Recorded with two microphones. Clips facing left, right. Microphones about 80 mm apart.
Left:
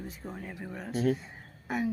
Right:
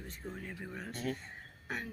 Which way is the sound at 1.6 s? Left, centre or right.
Centre.